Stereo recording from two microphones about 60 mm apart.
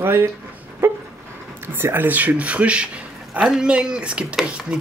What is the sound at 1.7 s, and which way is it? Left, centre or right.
Speech, right.